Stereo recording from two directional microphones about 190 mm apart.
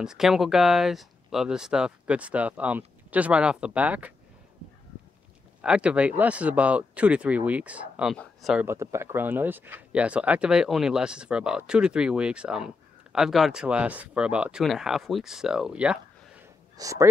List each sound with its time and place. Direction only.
0.0 s speech: centre (ahead or behind)
5.6 s speech: 5° right (ahead or behind)
8.6 s speech: 15° right (ahead or behind)
16.7 s speech: 15° right (ahead or behind)